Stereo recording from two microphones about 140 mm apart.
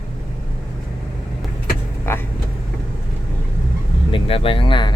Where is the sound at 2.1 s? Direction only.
15° left (ahead or behind).